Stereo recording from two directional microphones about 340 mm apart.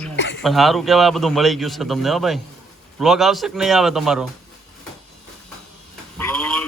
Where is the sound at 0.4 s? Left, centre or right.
Centre.